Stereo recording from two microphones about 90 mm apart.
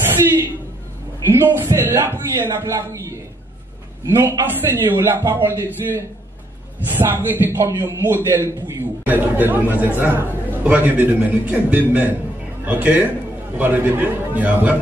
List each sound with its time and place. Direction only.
0.0 s a sound: 25° right (ahead or behind)
1.2 s a man's voice: 25° right (ahead or behind)
4.2 s a man's voice: 25° right (ahead or behind)